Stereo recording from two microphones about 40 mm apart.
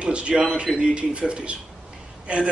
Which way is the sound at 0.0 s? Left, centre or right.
Right.